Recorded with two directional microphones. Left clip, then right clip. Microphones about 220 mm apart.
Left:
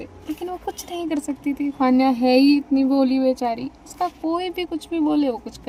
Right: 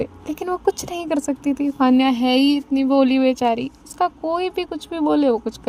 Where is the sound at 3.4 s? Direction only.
90° right.